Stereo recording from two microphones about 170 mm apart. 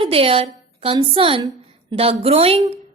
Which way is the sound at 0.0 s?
35° right (ahead or behind).